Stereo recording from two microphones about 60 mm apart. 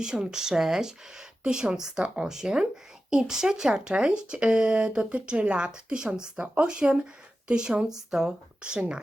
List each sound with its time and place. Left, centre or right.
0.0 s speech: centre